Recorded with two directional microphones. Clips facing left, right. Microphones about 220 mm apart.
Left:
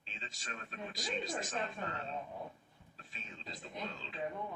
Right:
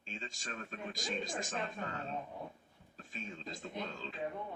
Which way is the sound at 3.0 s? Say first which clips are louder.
Right 7 dB; 45° right (ahead or behind).